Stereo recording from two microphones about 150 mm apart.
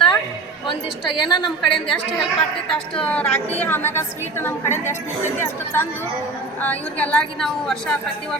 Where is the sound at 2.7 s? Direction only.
5° left (ahead or behind).